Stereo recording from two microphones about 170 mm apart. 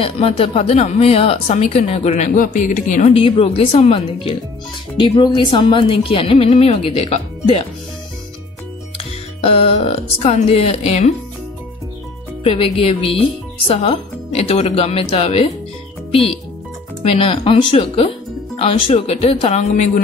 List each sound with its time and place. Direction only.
0.0 s speech: 35° left (ahead or behind)
3.1 s speech: 35° left (ahead or behind)
8.9 s speech: 35° left (ahead or behind)
12.4 s speech: 35° left (ahead or behind)
17.1 s speech: 35° left (ahead or behind)